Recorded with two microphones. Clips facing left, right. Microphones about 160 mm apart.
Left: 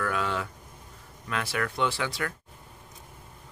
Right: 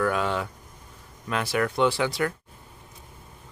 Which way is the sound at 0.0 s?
25° right (ahead or behind).